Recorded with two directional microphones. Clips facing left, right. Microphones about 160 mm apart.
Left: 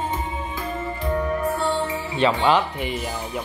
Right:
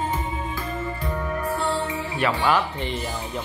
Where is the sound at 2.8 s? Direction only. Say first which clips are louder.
Left 1 dB; 10° left (ahead or behind).